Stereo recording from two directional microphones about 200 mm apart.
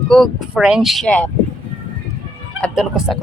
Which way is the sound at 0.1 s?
Centre (ahead or behind).